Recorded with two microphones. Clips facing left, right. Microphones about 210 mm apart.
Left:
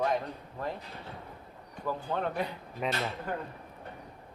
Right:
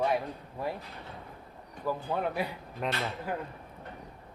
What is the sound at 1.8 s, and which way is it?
A man's voice, 10° right (ahead or behind).